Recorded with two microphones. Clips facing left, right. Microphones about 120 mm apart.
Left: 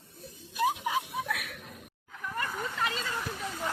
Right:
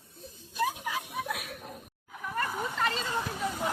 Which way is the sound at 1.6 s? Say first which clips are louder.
Right 4 dB; 45° right (ahead or behind).